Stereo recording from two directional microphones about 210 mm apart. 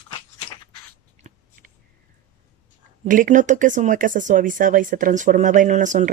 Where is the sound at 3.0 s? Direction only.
40° right (ahead or behind).